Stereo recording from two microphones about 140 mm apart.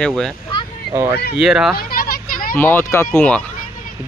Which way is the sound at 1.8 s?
90° left.